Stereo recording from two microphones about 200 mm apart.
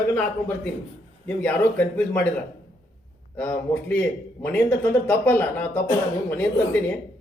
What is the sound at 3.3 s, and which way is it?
A man's voice, 10° left (ahead or behind).